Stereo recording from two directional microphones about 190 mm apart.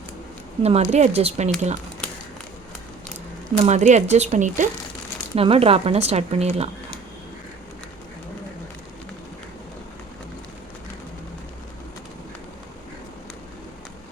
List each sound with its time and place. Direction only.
0.6 s speech: 35° right (ahead or behind)
3.5 s speech: 35° right (ahead or behind)
5.3 s speech: 30° right (ahead or behind)